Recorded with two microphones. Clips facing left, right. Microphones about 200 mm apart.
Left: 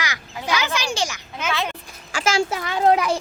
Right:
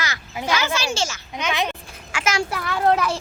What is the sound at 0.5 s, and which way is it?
Speech, 15° left (ahead or behind).